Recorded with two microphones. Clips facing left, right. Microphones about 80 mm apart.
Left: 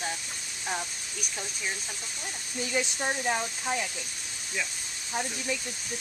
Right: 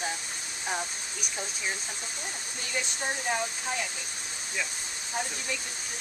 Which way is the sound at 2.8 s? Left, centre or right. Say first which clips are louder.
Left 2 dB; centre.